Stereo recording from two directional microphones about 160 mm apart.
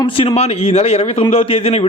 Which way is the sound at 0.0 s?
30° left (ahead or behind).